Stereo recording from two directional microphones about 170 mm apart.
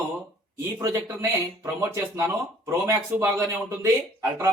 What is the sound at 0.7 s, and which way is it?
Speech, 15° right (ahead or behind).